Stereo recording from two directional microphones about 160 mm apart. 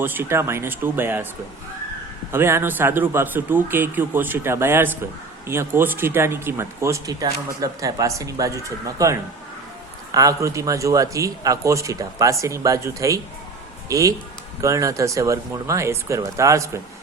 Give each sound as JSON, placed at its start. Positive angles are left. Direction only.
{"t": 0.0, "sound": "speech", "side_deg": -10}
{"t": 2.3, "sound": "speech", "side_deg": -15}